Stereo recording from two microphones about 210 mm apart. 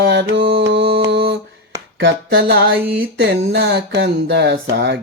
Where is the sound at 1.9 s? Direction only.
55° right (ahead or behind).